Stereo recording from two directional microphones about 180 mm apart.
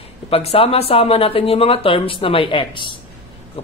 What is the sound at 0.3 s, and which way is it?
A man's voice, 35° left (ahead or behind).